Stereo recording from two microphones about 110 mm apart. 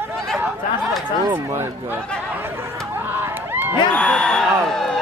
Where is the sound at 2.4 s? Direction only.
20° right (ahead or behind).